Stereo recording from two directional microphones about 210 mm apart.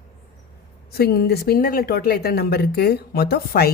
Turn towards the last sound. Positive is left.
turn(degrees=45)  # may be behind; listen again after turning